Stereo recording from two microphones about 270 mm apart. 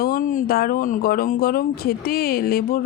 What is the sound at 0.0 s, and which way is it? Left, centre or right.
Speech, left.